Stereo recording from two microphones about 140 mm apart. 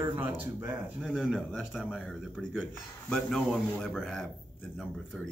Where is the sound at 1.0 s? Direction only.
Centre (ahead or behind).